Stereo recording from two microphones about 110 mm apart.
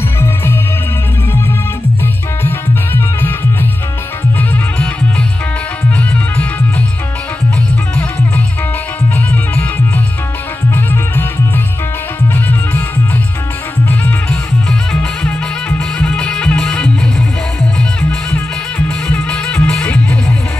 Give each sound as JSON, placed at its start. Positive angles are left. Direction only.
{"t": 2.4, "sound": "music", "side_deg": 20}
{"t": 10.7, "sound": "music", "side_deg": 20}
{"t": 13.8, "sound": "music", "side_deg": 10}
{"t": 19.0, "sound": "music", "side_deg": 10}